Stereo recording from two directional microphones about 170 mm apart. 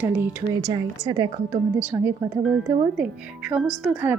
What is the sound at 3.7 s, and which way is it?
Speech, centre (ahead or behind).